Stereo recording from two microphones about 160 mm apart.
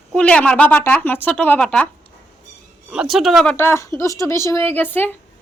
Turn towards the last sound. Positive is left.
turn(degrees=10)  # may be behind; listen again after turning